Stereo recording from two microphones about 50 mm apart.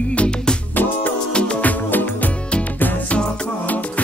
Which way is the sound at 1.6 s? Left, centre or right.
Left.